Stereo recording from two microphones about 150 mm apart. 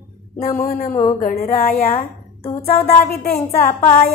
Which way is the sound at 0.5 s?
50° left (ahead or behind).